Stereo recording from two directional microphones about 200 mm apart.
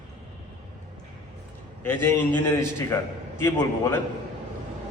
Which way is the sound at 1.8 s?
10° left (ahead or behind).